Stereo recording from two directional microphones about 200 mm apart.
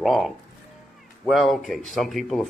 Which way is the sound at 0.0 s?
Centre (ahead or behind).